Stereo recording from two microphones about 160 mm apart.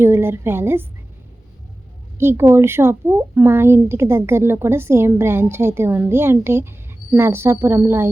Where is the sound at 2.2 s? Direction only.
15° right (ahead or behind).